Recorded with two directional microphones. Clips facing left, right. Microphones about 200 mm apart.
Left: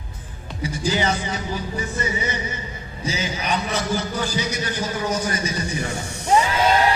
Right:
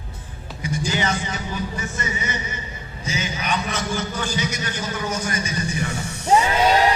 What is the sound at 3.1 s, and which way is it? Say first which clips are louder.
A man's voice: left 1 dB; 35° left (ahead or behind).